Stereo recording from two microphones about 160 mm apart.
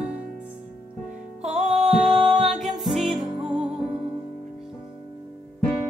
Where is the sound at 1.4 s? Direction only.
45° right (ahead or behind).